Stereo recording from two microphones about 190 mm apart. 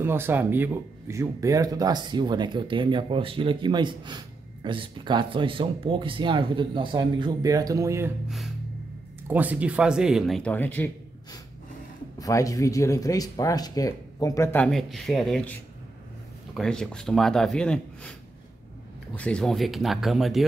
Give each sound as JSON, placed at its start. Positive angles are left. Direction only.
{"t": 0.0, "sound": "speech", "side_deg": -10}
{"t": 8.3, "sound": "speech", "side_deg": 0}
{"t": 12.2, "sound": "speech", "side_deg": 15}
{"t": 19.1, "sound": "speech", "side_deg": 5}